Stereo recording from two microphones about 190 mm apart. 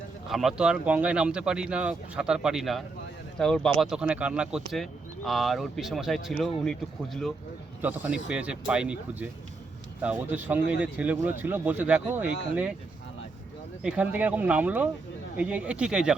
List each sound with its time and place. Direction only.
0.3 s speech: centre (ahead or behind)
7.8 s speech: 10° right (ahead or behind)
13.8 s speech: 5° right (ahead or behind)